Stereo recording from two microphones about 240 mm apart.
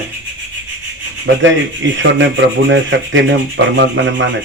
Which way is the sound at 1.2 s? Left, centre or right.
Right.